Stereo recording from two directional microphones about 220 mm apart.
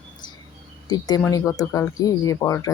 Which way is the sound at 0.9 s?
15° left (ahead or behind).